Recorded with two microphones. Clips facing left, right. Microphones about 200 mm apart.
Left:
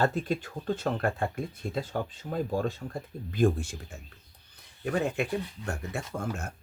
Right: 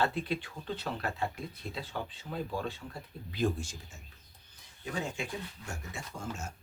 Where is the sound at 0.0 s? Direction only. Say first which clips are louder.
Left 4 dB; 45° left (ahead or behind).